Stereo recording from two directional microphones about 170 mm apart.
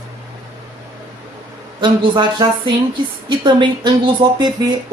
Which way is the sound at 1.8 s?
25° right (ahead or behind).